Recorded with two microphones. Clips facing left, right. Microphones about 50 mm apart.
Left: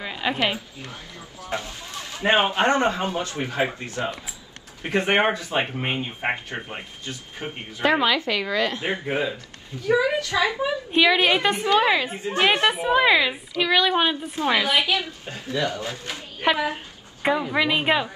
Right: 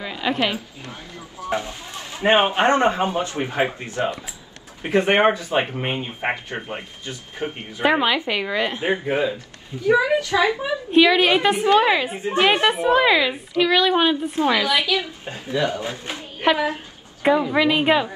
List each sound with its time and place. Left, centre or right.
0.0 s a sound: centre
0.8 s speech: right
4.8 s speech: centre; by 10.5 s right
10.9 s a woman's voice: centre
11.4 s speech: centre
12.2 s speech: right
12.4 s a woman's voice: centre
14.5 s a woman's voice: left
15.0 s speech: right
17.2 s a woman's voice: centre